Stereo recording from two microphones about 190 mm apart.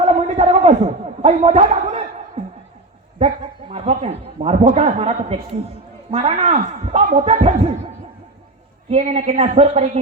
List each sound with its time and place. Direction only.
0.0 s a sound: 35° right (ahead or behind)
1.2 s a man's voice: 35° right (ahead or behind)
3.2 s a man's voice: 30° right (ahead or behind)
8.9 s speech: 35° right (ahead or behind)